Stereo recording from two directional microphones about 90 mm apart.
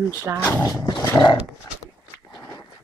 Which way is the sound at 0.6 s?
40° left (ahead or behind).